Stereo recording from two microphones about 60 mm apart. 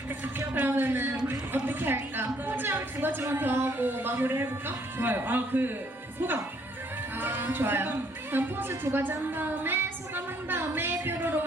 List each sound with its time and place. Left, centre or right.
0.6 s a sound: right
2.5 s a woman's voice: right
7.2 s speech: right